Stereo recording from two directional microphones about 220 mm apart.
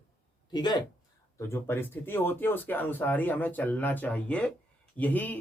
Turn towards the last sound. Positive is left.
turn(degrees=5)  # may be behind; listen again after turning